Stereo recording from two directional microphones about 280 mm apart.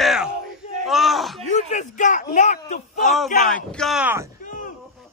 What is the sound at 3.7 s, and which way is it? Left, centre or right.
Speech, centre.